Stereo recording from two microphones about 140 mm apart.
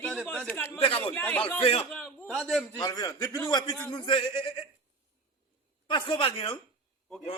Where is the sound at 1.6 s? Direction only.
45° left (ahead or behind).